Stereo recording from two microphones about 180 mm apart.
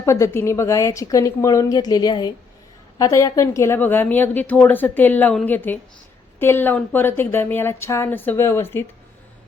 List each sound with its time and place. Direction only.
0.0 s a woman's voice: 15° left (ahead or behind)